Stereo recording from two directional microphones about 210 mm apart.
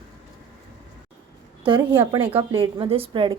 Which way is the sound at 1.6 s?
20° right (ahead or behind).